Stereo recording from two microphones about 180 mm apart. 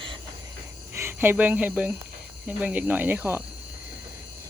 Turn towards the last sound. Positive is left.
turn(degrees=-10)  # may be behind; listen again after turning